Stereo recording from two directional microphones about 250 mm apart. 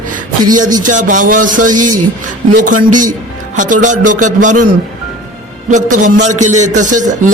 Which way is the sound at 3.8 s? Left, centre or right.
Right.